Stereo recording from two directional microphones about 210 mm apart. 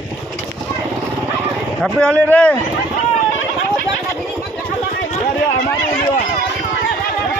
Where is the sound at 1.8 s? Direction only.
5° left (ahead or behind).